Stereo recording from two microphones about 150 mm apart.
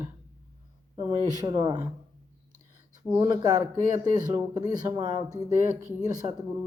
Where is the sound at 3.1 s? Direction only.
25° right (ahead or behind).